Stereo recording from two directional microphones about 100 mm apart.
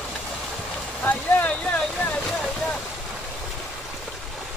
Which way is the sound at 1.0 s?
15° left (ahead or behind).